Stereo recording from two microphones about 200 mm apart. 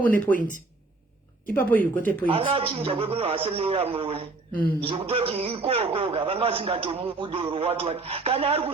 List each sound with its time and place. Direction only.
0.3 s speech: 40° left (ahead or behind)
1.5 s speech: 10° left (ahead or behind)
2.2 s a man's voice: 25° right (ahead or behind)